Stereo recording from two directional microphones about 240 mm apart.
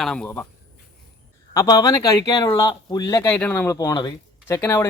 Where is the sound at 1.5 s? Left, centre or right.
Centre.